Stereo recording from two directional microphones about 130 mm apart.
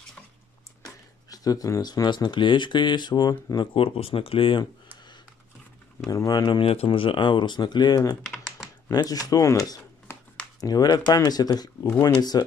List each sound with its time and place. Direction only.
1.3 s speech: 30° left (ahead or behind)
3.7 s speech: 45° left (ahead or behind)
6.0 s speech: 30° left (ahead or behind)